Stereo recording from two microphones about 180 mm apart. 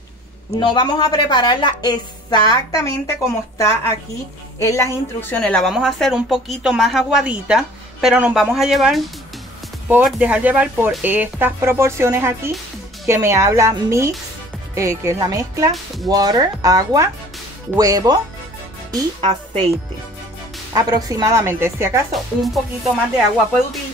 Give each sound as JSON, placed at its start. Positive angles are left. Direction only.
{"t": 0.6, "sound": "a woman's voice", "side_deg": 25}
{"t": 20.7, "sound": "speech", "side_deg": -20}
{"t": 22.1, "sound": "speech", "side_deg": 0}